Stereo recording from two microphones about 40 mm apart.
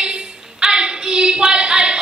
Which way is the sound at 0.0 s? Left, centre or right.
Right.